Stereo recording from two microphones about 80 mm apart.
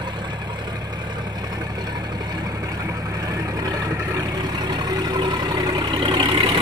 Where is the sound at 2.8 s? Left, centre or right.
Right.